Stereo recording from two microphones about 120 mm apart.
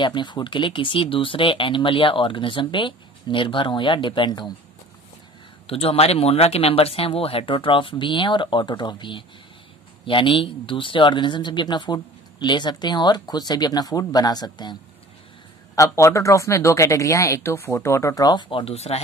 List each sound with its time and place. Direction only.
0.0 s speech: 40° left (ahead or behind)
5.7 s speech: 55° left (ahead or behind); by 14.8 s 35° left (ahead or behind)
15.7 s speech: 25° left (ahead or behind); by 18.9 s 60° left (ahead or behind)